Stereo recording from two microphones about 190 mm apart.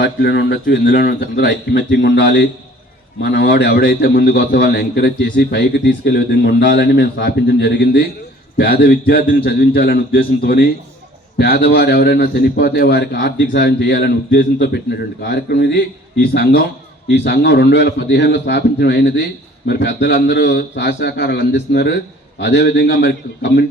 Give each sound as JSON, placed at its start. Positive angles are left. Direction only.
{"t": 0.0, "sound": "a man's voice", "side_deg": 65}
{"t": 0.6, "sound": "a man's voice", "side_deg": 55}
{"t": 17.1, "sound": "a man's voice", "side_deg": 65}